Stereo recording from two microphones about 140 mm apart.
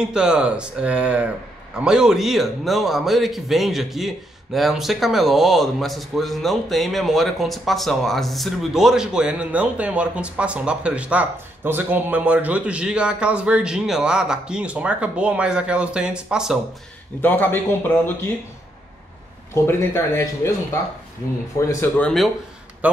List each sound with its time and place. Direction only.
0.0 s a man's voice: 5° right (ahead or behind)
17.2 s a man's voice: 15° left (ahead or behind)
19.5 s speech: 20° left (ahead or behind)
21.5 s speech: 20° left (ahead or behind)
22.0 s a man's voice: centre (ahead or behind)